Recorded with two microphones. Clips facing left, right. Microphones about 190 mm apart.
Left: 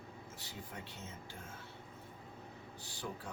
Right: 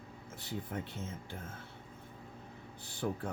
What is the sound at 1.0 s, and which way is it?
Speech, 55° right (ahead or behind).